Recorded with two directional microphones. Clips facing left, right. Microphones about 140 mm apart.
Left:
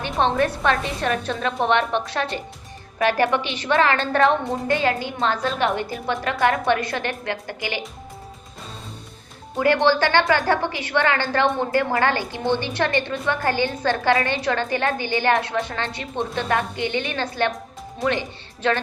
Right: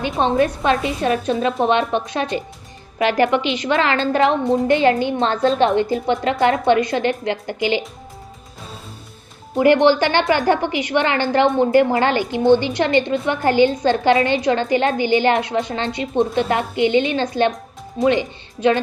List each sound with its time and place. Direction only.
0.2 s a woman's voice: 15° right (ahead or behind)
9.6 s a woman's voice: 20° right (ahead or behind)